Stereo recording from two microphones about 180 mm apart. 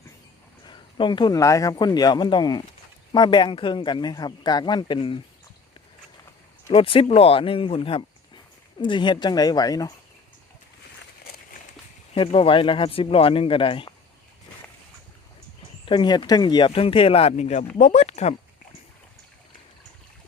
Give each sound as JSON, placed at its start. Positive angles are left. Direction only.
{"t": 0.6, "sound": "a man's voice", "side_deg": 25}
{"t": 6.7, "sound": "a man's voice", "side_deg": 30}
{"t": 12.1, "sound": "a man's voice", "side_deg": 30}
{"t": 15.9, "sound": "speech", "side_deg": 25}